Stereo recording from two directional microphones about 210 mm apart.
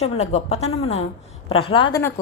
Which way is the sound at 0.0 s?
30° left (ahead or behind).